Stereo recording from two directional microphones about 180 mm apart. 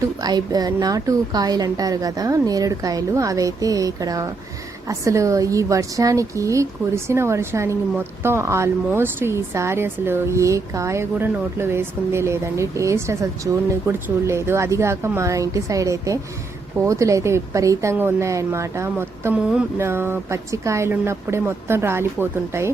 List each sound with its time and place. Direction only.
0.2 s a woman's voice: 20° right (ahead or behind)